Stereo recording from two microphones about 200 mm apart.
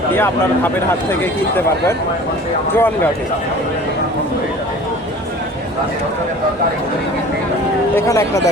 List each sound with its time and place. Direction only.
0.1 s speech: 10° left (ahead or behind)
7.9 s speech: 15° left (ahead or behind)